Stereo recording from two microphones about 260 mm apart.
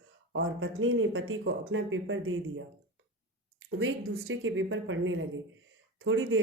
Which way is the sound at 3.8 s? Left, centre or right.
Right.